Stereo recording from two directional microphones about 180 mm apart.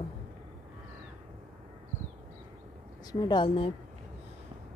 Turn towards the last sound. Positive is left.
turn(degrees=30)  # may be behind; listen again after turning